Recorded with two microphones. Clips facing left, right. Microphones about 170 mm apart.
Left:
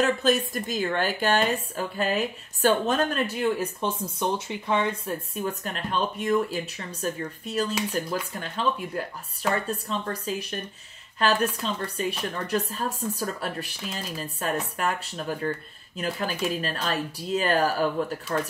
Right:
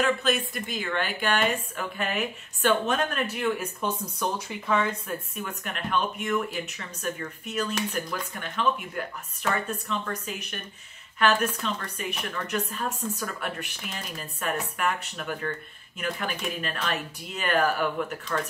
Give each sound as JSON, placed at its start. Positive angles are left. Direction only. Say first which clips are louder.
{"t": 0.0, "sound": "a woman's voice", "louder": "left 3 dB", "side_deg": 40}